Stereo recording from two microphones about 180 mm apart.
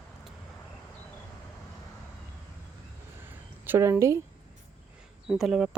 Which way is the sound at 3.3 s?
10° right (ahead or behind).